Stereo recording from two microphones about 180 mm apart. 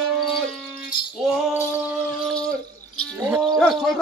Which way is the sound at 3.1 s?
15° right (ahead or behind).